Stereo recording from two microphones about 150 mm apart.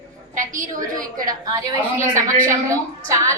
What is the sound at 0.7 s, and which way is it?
Speech, 25° right (ahead or behind).